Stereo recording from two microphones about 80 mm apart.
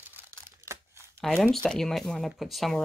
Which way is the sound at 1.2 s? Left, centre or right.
Centre.